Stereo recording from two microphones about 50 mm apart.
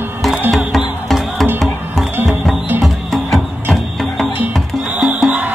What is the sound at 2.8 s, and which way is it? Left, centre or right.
Music, centre.